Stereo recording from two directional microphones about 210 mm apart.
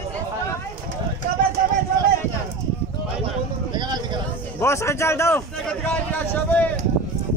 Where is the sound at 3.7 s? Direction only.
20° right (ahead or behind).